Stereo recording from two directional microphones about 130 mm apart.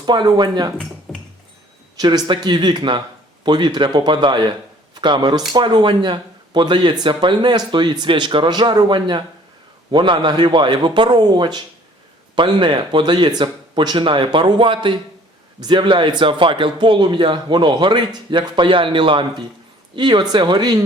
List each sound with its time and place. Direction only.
0.0 s speech: 35° right (ahead or behind)
1.1 s music: centre (ahead or behind)
2.0 s speech: 30° right (ahead or behind)